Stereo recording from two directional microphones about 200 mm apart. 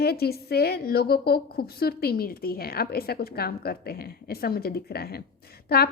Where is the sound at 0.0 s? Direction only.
50° left (ahead or behind).